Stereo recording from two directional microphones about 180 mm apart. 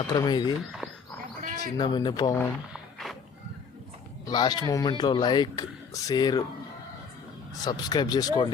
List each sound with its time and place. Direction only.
0.1 s speech: 25° left (ahead or behind)
1.4 s bird: 50° right (ahead or behind)
1.8 s speech: 25° left (ahead or behind)
4.3 s speech: 20° left (ahead or behind)
7.6 s speech: 20° left (ahead or behind)